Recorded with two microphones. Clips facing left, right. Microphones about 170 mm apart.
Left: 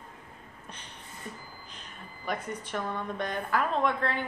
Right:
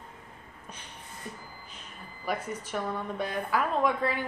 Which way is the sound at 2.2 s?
10° right (ahead or behind).